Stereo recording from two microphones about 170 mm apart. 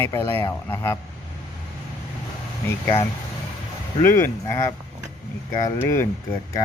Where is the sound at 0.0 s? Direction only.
15° left (ahead or behind).